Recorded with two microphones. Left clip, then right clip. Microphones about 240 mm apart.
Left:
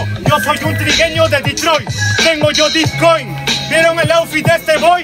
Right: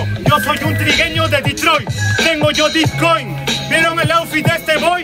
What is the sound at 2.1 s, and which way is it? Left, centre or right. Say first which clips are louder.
Music: left 2 dB; left.